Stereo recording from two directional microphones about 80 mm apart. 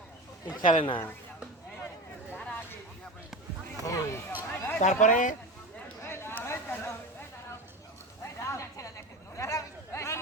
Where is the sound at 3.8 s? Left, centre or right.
Left.